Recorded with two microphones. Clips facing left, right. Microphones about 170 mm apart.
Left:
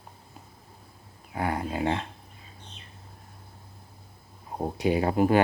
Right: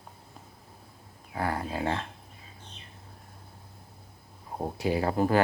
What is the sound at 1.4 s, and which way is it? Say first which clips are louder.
Speech: left 2 dB; 20° left (ahead or behind).